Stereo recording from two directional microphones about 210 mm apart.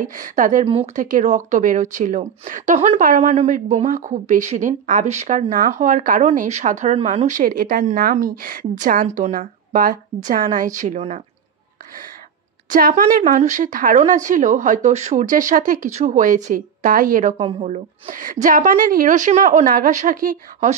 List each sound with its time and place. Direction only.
0.0 s a woman's voice: 40° right (ahead or behind)
12.6 s a woman's voice: 40° right (ahead or behind)